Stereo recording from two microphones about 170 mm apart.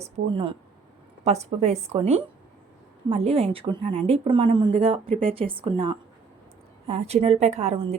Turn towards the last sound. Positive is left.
turn(degrees=-35)  # may be behind; listen again after turning